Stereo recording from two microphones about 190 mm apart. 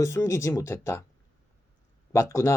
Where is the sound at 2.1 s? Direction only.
15° left (ahead or behind).